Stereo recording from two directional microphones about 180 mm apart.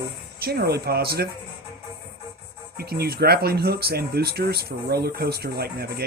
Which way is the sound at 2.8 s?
60° right (ahead or behind).